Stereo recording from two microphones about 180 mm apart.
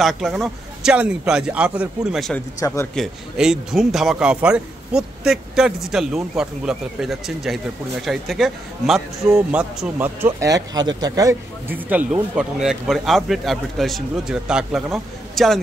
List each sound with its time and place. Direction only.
0.0 s speech: centre (ahead or behind)
2.6 s speech: 15° left (ahead or behind)
2.9 s speech: centre (ahead or behind); by 11.8 s 20° right (ahead or behind)
11.9 s speech: 5° right (ahead or behind)